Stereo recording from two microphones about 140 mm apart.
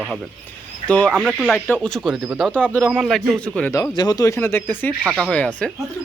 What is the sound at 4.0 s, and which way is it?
Speech, 25° left (ahead or behind).